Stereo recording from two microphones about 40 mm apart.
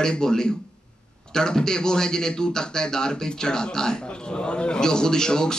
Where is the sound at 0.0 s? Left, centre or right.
Centre.